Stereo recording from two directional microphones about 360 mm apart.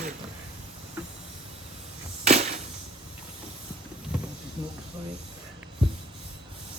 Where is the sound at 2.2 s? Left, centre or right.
Centre.